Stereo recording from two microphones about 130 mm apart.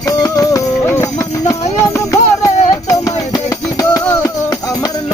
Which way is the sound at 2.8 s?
25° left (ahead or behind).